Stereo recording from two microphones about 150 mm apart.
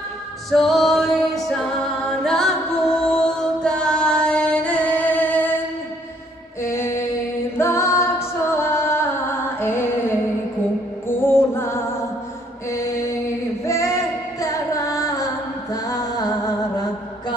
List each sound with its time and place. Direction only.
0.5 s music: centre (ahead or behind)
6.6 s mantra: 20° left (ahead or behind)
7.5 s music: 15° left (ahead or behind)
11.1 s music: 15° left (ahead or behind)
12.7 s mantra: 20° left (ahead or behind)
13.7 s female singing: 20° left (ahead or behind)
15.7 s music: 25° left (ahead or behind)